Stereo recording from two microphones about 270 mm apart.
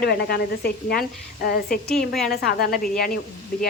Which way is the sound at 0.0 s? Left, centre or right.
Left.